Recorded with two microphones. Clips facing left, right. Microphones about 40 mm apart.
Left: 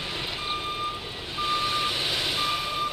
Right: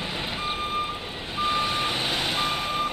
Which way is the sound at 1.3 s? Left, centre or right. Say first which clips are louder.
Right 2 dB; right.